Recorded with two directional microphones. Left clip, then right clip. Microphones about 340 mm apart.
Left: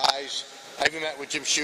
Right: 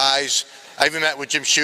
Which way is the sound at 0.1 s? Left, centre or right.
Right.